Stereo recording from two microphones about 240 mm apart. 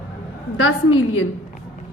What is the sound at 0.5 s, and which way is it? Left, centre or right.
Speech, left.